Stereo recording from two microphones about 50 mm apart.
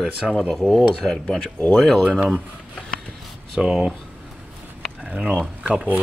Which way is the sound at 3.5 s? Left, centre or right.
Centre.